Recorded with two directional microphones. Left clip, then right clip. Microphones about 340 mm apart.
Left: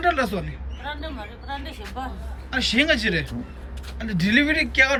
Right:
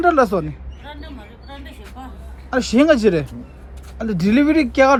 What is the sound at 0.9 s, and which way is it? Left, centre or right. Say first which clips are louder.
A man's voice: left 4 dB; centre.